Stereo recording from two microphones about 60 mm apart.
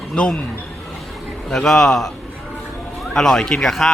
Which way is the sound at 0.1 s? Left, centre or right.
Centre.